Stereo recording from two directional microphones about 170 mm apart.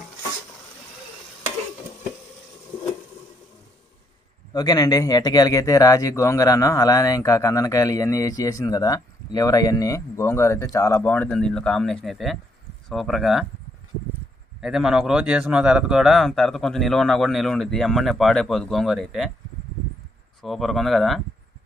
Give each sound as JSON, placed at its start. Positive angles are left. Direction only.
{"t": 4.6, "sound": "a man's voice", "side_deg": 20}
{"t": 14.6, "sound": "a man's voice", "side_deg": -5}
{"t": 20.4, "sound": "a man's voice", "side_deg": 0}